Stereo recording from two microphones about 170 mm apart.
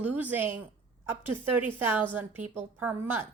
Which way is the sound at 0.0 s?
10° right (ahead or behind).